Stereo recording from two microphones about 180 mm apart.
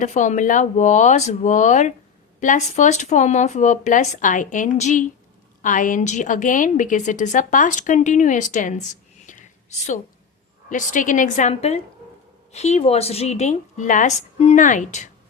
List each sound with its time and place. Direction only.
0.0 s a woman's voice: 40° left (ahead or behind)
9.2 s whispering: 40° left (ahead or behind)
10.7 s a woman's voice: 45° left (ahead or behind)